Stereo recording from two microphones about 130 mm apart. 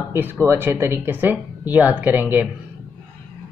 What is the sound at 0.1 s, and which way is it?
Speech, 15° right (ahead or behind).